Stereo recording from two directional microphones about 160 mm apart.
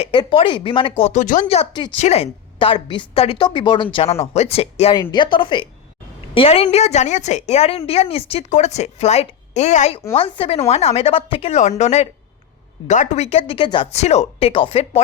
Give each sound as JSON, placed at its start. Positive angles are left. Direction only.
{"t": 0.0, "sound": "a woman's voice", "side_deg": 30}
{"t": 3.9, "sound": "a woman's voice", "side_deg": 40}
{"t": 10.2, "sound": "a woman's voice", "side_deg": 35}
{"t": 13.9, "sound": "a woman's voice", "side_deg": 45}